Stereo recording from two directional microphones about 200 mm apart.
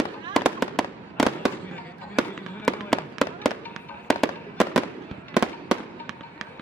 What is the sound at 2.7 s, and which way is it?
Fireworks, centre (ahead or behind).